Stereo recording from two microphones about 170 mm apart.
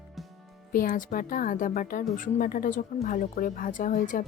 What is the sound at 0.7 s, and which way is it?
Speech, 55° left (ahead or behind).